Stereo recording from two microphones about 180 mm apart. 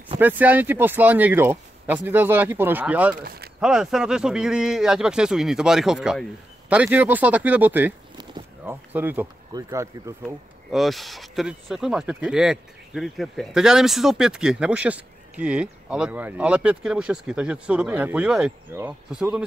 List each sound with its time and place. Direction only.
0.2 s speech: 10° right (ahead or behind)
3.2 s speech: 55° right (ahead or behind)
3.6 s speech: 5° right (ahead or behind)
10.2 s speech: centre (ahead or behind)